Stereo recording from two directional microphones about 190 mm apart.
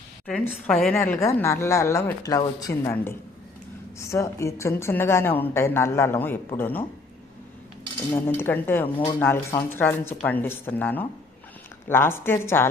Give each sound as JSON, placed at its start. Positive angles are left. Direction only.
{"t": 0.3, "sound": "a woman's voice", "side_deg": 5}
{"t": 8.1, "sound": "a woman's voice", "side_deg": 10}